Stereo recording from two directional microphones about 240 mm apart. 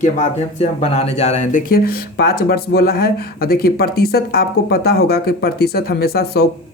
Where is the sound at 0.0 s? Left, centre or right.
Left.